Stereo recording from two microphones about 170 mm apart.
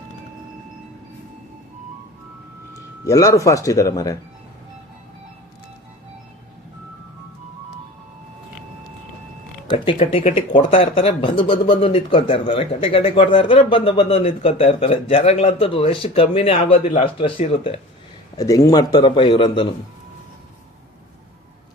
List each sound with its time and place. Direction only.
3.0 s speech: 20° left (ahead or behind)
9.6 s a man's voice: 30° left (ahead or behind)
18.3 s speech: 20° left (ahead or behind)